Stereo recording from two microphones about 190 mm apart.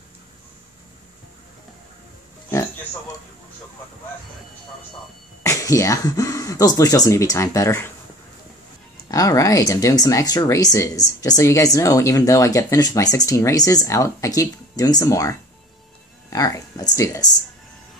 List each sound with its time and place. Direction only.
5.4 s speech: 15° left (ahead or behind)
9.1 s speech: 15° left (ahead or behind)